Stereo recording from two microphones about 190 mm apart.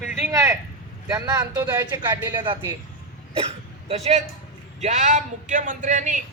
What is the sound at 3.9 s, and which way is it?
A man's voice, 35° right (ahead or behind).